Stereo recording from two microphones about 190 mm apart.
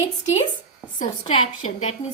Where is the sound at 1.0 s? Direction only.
30° left (ahead or behind).